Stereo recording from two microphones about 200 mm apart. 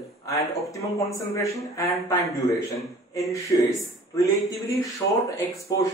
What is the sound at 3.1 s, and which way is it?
A man's voice, 15° left (ahead or behind).